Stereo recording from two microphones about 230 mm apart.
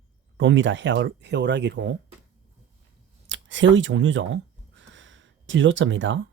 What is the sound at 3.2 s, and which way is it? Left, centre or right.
Speech, right.